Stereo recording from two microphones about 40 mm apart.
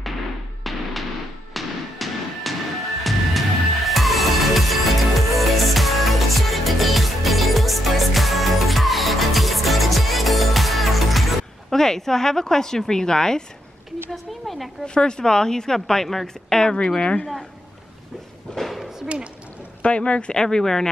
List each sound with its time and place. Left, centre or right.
0.7 s music: centre
11.7 s speech: centre
14.1 s a woman's voice: centre
15.0 s a man's voice: left
18.6 s a sound: centre
19.8 s a man's voice: left
20.3 s speech: centre